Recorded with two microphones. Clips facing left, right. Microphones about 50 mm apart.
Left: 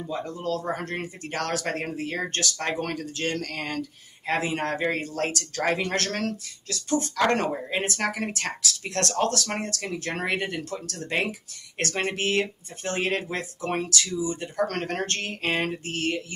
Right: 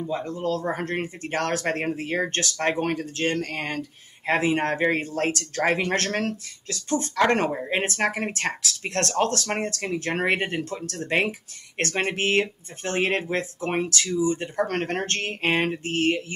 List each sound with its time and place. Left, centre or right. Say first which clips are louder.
0.1 s speech: right 2 dB; right